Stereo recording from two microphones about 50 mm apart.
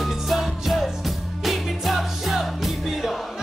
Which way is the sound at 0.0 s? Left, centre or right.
Centre.